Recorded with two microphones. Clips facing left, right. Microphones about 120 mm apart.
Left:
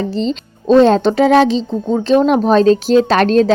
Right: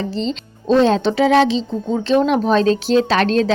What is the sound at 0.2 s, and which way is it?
Speech, 45° left (ahead or behind).